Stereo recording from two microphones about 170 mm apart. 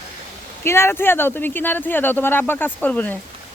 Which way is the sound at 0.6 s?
15° left (ahead or behind).